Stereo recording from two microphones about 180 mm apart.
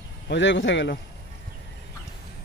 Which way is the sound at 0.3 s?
85° left.